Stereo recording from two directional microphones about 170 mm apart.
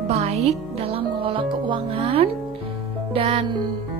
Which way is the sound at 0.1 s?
40° right (ahead or behind).